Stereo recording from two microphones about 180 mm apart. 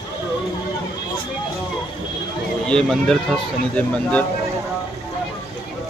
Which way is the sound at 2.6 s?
5° left (ahead or behind).